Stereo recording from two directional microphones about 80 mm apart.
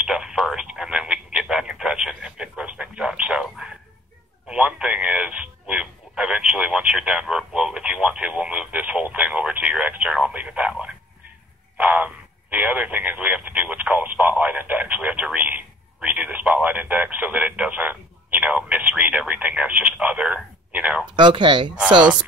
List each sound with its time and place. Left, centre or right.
0.0 s telephone: centre
4.5 s radio: centre
20.7 s a sound: centre
21.2 s speech: right